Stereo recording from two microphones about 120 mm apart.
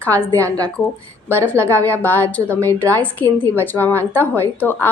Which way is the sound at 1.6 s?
15° left (ahead or behind).